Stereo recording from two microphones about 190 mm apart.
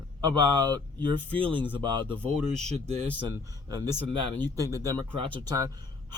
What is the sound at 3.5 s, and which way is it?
Speech, 20° right (ahead or behind).